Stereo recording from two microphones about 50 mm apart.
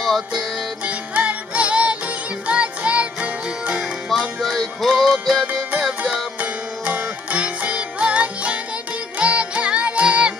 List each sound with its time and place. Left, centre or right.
0.8 s music: right
4.4 s music: centre
6.4 s music: right